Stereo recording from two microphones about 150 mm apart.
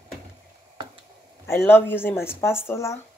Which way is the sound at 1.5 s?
15° left (ahead or behind).